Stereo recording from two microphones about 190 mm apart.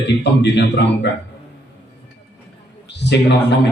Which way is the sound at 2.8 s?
65° left (ahead or behind).